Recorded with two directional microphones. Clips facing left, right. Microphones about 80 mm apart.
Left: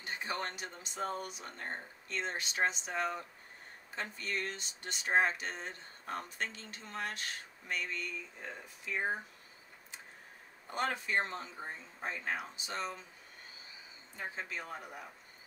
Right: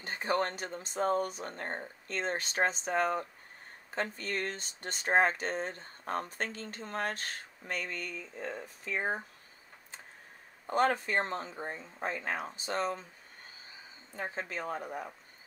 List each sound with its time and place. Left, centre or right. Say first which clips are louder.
0.0 s speech: right 7 dB; right
10.7 s speech: right 6 dB; right
14.1 s speech: right 4 dB; right